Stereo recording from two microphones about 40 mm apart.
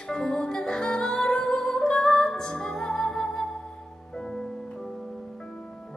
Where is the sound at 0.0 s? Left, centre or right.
Centre.